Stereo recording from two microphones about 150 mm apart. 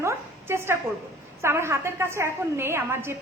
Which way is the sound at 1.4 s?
15° right (ahead or behind).